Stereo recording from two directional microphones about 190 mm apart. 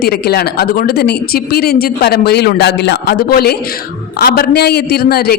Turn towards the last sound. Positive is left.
turn(degrees=55)  # may be behind; listen again after turning